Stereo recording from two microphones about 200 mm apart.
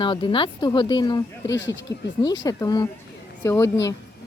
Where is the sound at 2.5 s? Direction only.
20° left (ahead or behind).